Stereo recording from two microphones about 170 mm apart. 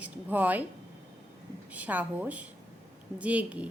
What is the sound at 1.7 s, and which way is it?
A woman's voice, 10° right (ahead or behind).